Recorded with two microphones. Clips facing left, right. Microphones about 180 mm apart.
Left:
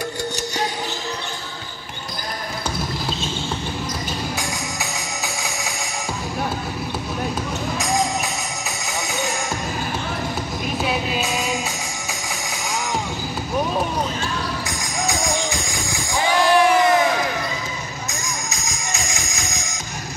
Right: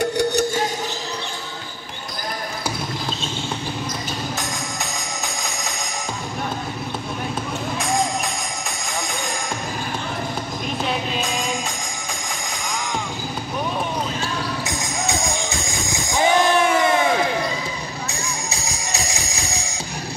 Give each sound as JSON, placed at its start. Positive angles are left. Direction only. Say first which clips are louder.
{"t": 0.2, "sound": "music", "louder": "right 8 dB", "side_deg": -65}
{"t": 4.4, "sound": "music", "louder": "left 1 dB", "side_deg": 5}
{"t": 8.6, "sound": "music", "louder": "even", "side_deg": 5}
{"t": 10.8, "sound": "music", "louder": "left 1 dB", "side_deg": 5}
{"t": 14.7, "sound": "music", "louder": "even", "side_deg": -25}
{"t": 18.1, "sound": "music", "louder": "right 1 dB", "side_deg": -35}